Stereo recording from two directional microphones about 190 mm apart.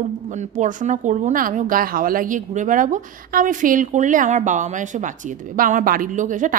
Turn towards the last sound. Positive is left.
turn(degrees=-45)  # may be behind; listen again after turning